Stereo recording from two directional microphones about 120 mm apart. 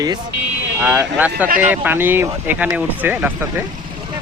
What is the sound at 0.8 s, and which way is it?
Speech, 15° right (ahead or behind).